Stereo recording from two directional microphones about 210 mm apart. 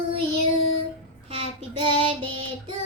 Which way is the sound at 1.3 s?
25° right (ahead or behind).